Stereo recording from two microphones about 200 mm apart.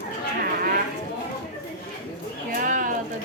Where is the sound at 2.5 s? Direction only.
45° right (ahead or behind).